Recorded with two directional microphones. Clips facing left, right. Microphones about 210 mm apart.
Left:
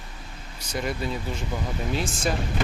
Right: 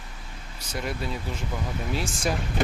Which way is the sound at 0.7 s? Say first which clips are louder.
Left 2 dB; centre (ahead or behind).